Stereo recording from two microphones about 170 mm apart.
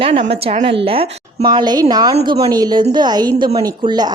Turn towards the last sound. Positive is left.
turn(degrees=-25)  # may be behind; listen again after turning